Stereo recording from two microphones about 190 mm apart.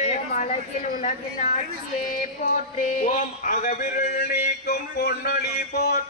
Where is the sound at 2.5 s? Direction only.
40° left (ahead or behind); by 5.9 s 60° left (ahead or behind).